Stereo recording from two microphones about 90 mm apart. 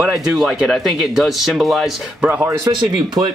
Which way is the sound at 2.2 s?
20° right (ahead or behind).